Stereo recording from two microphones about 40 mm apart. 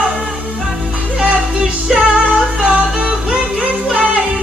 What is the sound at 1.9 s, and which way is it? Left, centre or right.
Music, right.